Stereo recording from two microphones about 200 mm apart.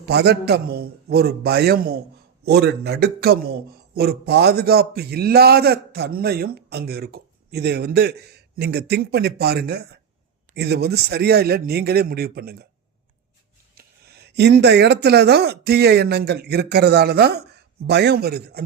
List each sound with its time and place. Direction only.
0.0 s a man's voice: 55° right (ahead or behind)
13.8 s a sound: 50° right (ahead or behind)
14.3 s speech: 55° right (ahead or behind)